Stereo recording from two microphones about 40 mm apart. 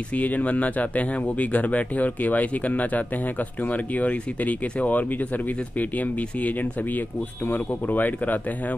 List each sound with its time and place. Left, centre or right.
0.1 s speech: left